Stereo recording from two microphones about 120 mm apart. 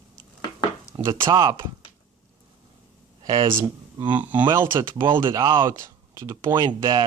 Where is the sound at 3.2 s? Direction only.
40° right (ahead or behind).